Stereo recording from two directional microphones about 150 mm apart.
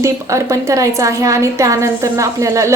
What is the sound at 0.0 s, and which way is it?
A woman's voice, 20° right (ahead or behind).